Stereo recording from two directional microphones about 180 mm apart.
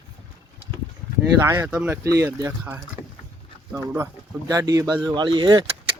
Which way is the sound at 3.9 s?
15° right (ahead or behind).